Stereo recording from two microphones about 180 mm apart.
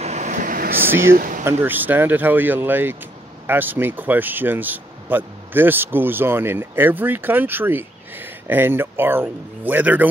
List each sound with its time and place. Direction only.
0.0 s vehicle: 40° right (ahead or behind)
1.1 s speech: 50° right (ahead or behind)
1.4 s speech: 10° right (ahead or behind)